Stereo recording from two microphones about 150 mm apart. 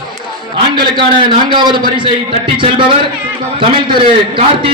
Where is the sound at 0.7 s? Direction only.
30° right (ahead or behind).